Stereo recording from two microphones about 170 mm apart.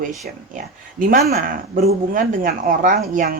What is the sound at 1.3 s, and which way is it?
Speech, 60° right (ahead or behind).